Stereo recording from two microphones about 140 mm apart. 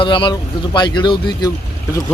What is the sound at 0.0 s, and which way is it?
Speech, 35° left (ahead or behind).